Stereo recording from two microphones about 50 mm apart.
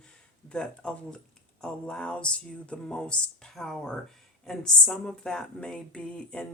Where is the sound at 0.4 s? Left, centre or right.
Left.